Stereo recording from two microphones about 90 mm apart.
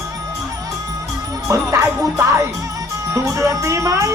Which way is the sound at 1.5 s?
35° right (ahead or behind).